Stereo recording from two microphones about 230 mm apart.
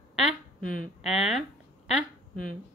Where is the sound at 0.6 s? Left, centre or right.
Left.